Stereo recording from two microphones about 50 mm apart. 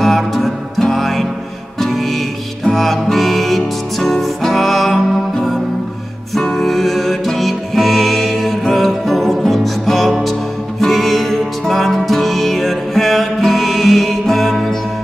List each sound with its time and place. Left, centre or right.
0.0 s music: centre